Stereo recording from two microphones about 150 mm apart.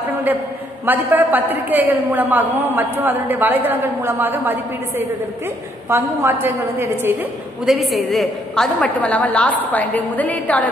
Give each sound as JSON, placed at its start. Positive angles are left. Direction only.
{"t": 0.8, "sound": "a woman's voice", "side_deg": -10}
{"t": 7.6, "sound": "a woman's voice", "side_deg": 0}